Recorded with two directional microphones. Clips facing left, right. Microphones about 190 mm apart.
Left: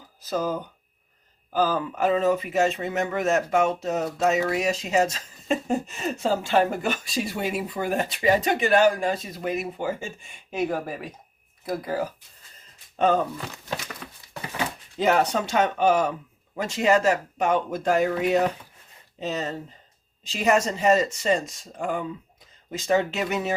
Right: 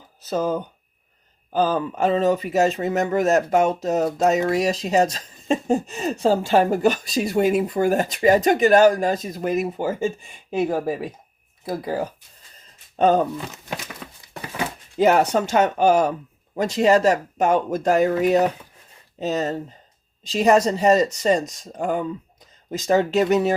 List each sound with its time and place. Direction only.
0.3 s speech: 25° right (ahead or behind)
1.5 s speech: 30° right (ahead or behind)
13.0 s speech: 40° right (ahead or behind)
14.9 s speech: 45° right (ahead or behind)